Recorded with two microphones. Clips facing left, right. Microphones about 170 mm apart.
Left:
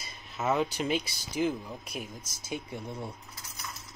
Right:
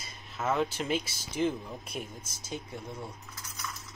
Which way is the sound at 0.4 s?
Centre (ahead or behind).